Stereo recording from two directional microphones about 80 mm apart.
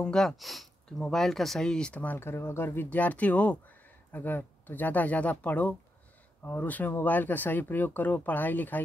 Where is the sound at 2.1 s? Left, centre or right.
Left.